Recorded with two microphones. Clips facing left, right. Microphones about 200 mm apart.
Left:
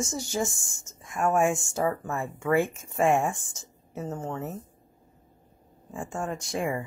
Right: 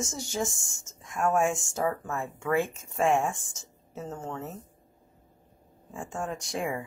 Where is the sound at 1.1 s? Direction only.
5° left (ahead or behind).